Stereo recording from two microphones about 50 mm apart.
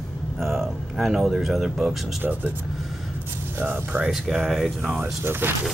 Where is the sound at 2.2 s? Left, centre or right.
Right.